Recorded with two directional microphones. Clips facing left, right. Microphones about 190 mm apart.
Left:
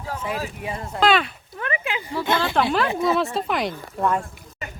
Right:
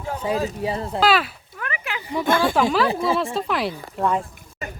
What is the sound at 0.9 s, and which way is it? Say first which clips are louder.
Speech: left 1 dB; 5° right (ahead or behind).